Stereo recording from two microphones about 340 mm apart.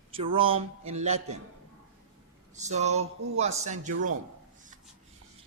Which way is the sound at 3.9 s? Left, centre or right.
Right.